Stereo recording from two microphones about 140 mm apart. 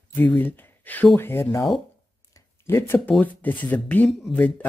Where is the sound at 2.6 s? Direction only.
15° left (ahead or behind).